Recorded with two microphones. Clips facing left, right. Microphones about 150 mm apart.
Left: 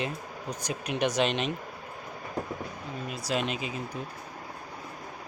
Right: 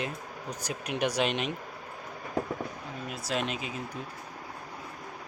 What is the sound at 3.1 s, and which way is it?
Speech, centre (ahead or behind).